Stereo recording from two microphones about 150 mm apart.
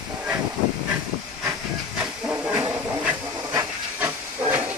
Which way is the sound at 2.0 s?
10° right (ahead or behind).